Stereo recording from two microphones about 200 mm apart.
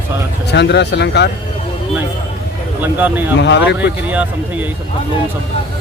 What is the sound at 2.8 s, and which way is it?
Speech, 10° right (ahead or behind).